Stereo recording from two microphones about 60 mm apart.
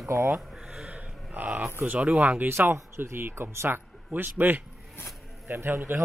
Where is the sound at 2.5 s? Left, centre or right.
Right.